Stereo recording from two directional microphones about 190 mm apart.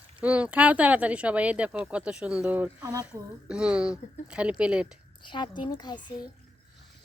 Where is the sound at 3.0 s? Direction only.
5° right (ahead or behind).